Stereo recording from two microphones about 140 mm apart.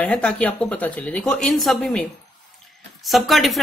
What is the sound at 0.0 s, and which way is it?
A woman's voice, 10° left (ahead or behind).